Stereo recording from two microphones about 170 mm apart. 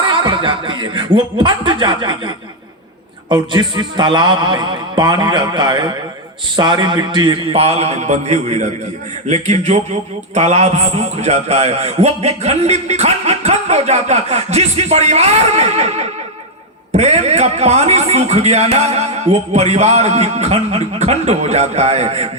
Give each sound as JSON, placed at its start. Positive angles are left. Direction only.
{"t": 0.0, "sound": "a man's voice", "side_deg": -30}